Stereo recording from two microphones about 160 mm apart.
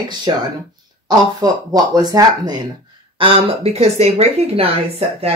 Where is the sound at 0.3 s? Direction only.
30° right (ahead or behind).